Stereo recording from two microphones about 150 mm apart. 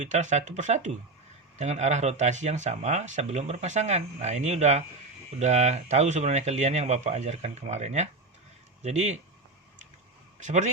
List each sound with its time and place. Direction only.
0.0 s speech: 55° right (ahead or behind)
10.4 s speech: 55° right (ahead or behind)